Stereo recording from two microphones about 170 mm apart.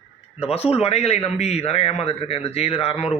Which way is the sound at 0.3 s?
35° left (ahead or behind).